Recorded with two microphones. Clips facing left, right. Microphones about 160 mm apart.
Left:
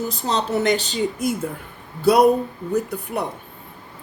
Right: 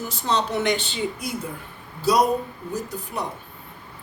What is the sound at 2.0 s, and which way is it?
Speech, 60° left (ahead or behind).